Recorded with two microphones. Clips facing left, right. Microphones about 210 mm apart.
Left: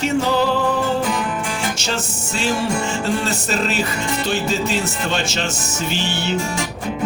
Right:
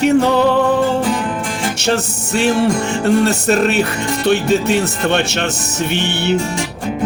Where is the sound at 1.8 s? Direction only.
65° right (ahead or behind).